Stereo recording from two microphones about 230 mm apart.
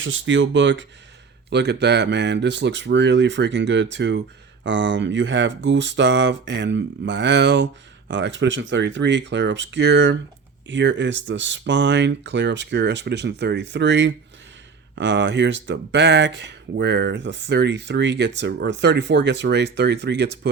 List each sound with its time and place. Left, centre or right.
0.0 s speech: right